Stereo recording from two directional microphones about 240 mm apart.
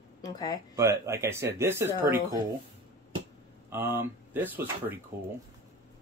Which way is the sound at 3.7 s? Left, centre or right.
Centre.